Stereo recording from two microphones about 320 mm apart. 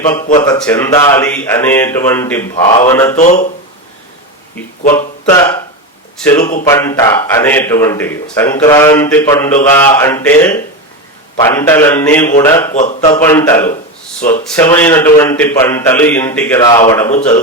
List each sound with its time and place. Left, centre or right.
0.4 s speech: centre
3.2 s speech: left
4.9 s speech: centre
12.7 s speech: left
13.1 s speech: centre